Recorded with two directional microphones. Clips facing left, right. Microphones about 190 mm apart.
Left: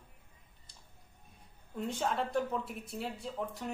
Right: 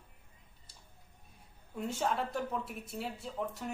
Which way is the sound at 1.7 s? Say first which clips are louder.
Even; 5° right (ahead or behind).